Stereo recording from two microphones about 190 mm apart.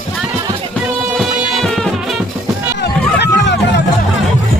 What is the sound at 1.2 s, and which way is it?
Music, centre (ahead or behind).